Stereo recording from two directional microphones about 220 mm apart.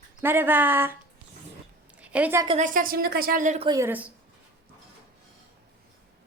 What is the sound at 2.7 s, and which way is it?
Speech, 40° right (ahead or behind).